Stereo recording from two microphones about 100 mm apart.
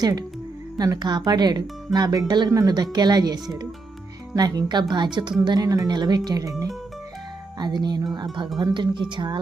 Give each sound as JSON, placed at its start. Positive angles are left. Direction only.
{"t": 0.0, "sound": "speech", "side_deg": -40}
{"t": 5.5, "sound": "speech", "side_deg": -40}
{"t": 7.6, "sound": "speech", "side_deg": -45}